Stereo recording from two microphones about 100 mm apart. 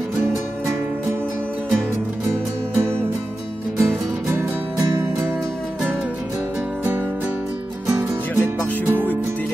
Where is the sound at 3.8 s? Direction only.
25° right (ahead or behind).